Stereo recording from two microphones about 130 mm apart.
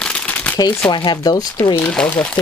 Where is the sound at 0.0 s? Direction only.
5° left (ahead or behind).